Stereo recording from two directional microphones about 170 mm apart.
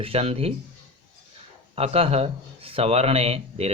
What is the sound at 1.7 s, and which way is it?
Speech, 35° right (ahead or behind).